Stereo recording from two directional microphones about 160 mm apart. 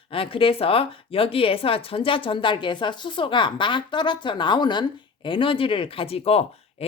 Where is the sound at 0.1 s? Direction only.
35° left (ahead or behind).